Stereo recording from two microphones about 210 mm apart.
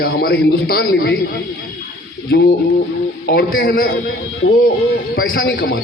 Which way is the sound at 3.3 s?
45° left (ahead or behind).